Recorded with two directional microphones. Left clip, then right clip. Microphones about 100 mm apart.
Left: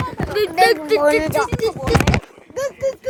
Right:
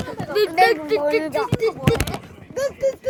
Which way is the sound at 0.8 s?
50° left (ahead or behind).